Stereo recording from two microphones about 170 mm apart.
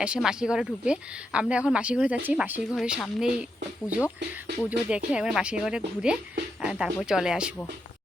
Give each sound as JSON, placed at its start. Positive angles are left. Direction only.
{"t": 0.0, "sound": "speech", "side_deg": -5}